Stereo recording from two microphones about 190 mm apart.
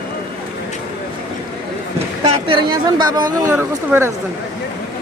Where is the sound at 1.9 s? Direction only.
30° right (ahead or behind); by 4.1 s 10° right (ahead or behind).